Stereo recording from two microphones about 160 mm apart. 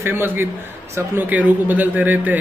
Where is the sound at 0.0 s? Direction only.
15° right (ahead or behind).